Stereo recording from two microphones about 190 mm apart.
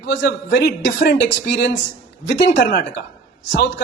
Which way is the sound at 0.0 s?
65° left (ahead or behind).